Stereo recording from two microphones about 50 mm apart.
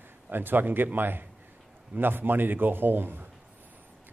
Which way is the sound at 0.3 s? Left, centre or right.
Right.